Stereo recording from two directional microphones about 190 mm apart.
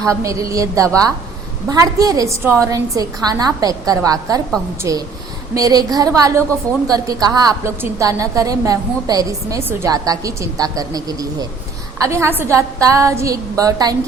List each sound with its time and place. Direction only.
0.0 s a woman's voice: 15° right (ahead or behind)